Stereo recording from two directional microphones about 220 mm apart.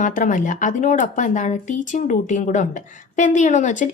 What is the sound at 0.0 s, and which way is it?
Speech, 35° left (ahead or behind).